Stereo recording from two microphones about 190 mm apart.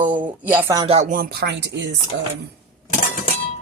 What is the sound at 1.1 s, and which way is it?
Speech, 55° right (ahead or behind).